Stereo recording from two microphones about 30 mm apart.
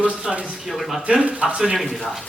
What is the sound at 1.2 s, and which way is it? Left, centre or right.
Speech, right.